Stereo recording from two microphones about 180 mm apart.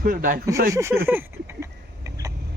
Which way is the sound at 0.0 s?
55° right (ahead or behind).